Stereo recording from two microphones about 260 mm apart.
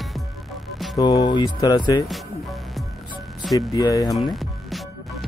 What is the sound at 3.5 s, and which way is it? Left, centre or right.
Speech, centre.